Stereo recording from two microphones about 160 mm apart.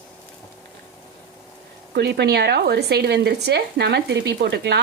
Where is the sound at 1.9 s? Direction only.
90° right.